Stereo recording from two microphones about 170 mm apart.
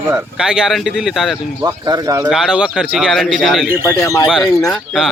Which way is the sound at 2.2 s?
5° right (ahead or behind).